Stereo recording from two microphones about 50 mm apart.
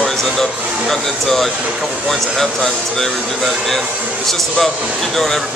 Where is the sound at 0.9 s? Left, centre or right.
Centre.